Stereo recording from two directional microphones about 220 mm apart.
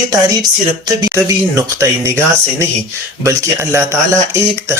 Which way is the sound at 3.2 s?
15° right (ahead or behind).